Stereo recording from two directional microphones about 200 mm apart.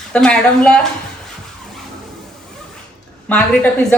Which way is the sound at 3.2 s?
5° left (ahead or behind).